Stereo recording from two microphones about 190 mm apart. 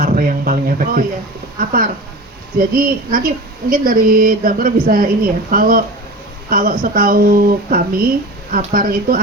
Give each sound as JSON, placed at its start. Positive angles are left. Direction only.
{"t": 0.0, "sound": "speech", "side_deg": -45}